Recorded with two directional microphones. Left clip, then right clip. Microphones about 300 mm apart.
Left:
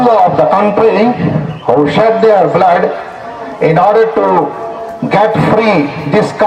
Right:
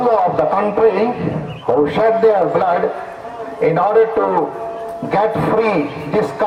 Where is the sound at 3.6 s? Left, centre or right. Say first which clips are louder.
Left 5 dB; left.